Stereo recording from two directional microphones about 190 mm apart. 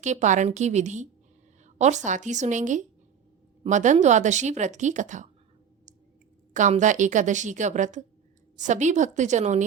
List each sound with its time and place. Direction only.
0.0 s speech: 40° right (ahead or behind)
1.6 s a sound: 40° right (ahead or behind)
2.0 s speech: 40° right (ahead or behind)
6.5 s speech: 40° right (ahead or behind)